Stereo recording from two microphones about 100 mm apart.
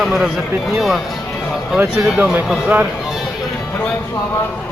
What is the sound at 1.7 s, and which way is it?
Speech, 10° right (ahead or behind).